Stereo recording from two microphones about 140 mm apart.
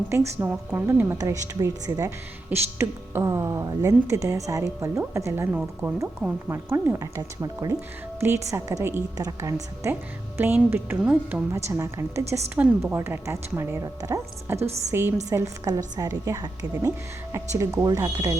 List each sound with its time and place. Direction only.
0.1 s speech: 20° right (ahead or behind)
5.8 s speech: 5° right (ahead or behind)
6.2 s a woman's voice: 15° right (ahead or behind)